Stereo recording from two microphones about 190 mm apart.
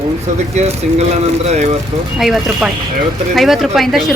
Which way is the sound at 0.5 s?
35° right (ahead or behind).